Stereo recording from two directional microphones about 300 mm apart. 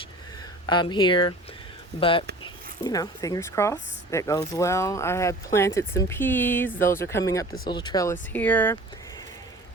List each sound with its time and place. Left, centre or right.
0.7 s speech: centre